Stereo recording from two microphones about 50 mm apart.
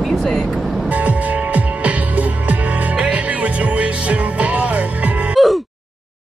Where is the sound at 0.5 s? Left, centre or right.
Centre.